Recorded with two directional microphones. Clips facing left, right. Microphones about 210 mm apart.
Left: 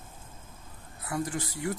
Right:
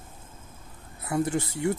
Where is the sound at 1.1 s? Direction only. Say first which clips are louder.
Right 6 dB; 25° right (ahead or behind).